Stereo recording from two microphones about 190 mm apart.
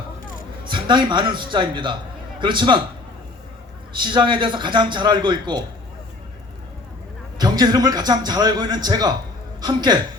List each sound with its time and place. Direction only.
0.7 s a man's voice: 25° right (ahead or behind)
4.0 s a man's voice: 25° right (ahead or behind)
7.3 s a man's voice: 20° right (ahead or behind)